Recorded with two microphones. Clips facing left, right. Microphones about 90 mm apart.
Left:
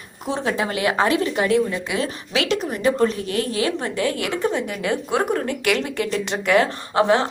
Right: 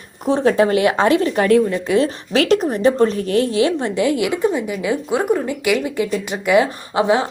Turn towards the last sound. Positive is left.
turn(degrees=-15)  # may be behind; listen again after turning